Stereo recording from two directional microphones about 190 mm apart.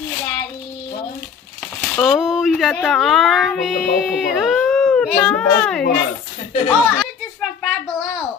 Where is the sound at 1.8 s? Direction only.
Centre (ahead or behind).